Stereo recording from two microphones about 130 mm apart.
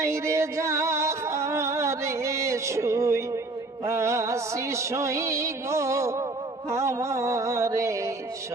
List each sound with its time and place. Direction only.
0.0 s music: 20° right (ahead or behind)